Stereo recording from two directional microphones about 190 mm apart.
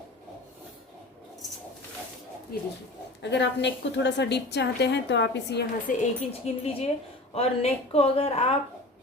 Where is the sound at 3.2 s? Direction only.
65° left (ahead or behind).